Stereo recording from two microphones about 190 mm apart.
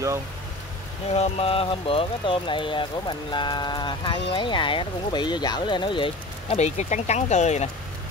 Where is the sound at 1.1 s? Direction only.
35° left (ahead or behind).